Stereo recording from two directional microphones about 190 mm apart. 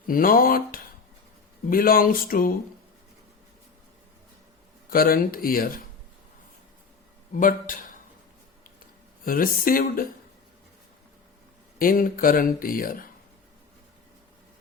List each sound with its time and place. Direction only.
0.1 s speech: 45° left (ahead or behind)
4.9 s speech: 50° left (ahead or behind)
7.3 s speech: 45° left (ahead or behind)
9.2 s speech: 50° left (ahead or behind)
11.8 s speech: 45° left (ahead or behind)